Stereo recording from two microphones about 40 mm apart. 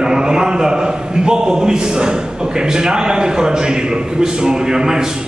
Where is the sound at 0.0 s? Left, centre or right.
Centre.